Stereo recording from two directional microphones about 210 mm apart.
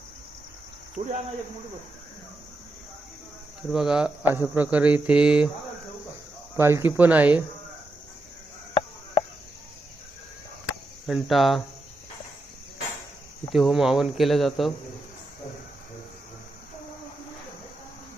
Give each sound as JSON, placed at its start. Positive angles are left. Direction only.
{"t": 1.0, "sound": "speech", "side_deg": -35}
{"t": 3.7, "sound": "speech", "side_deg": -5}
{"t": 6.6, "sound": "speech", "side_deg": -10}
{"t": 11.0, "sound": "speech", "side_deg": 0}
{"t": 13.5, "sound": "speech", "side_deg": 0}